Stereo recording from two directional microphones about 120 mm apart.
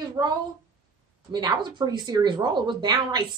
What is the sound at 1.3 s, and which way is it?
Speech, 35° right (ahead or behind).